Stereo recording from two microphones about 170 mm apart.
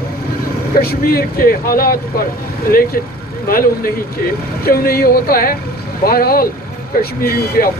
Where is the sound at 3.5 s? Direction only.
60° left (ahead or behind).